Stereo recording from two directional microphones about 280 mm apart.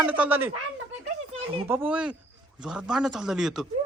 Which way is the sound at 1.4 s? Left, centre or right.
Centre.